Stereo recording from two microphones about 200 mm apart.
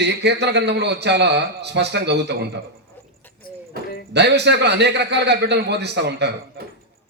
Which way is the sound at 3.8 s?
50° right (ahead or behind).